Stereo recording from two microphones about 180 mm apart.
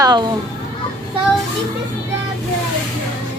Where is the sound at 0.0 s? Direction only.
25° right (ahead or behind).